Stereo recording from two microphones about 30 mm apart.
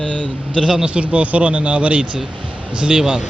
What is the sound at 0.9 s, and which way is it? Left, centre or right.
Speech, right.